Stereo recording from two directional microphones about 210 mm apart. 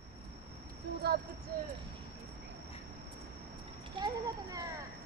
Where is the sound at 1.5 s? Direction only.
45° right (ahead or behind).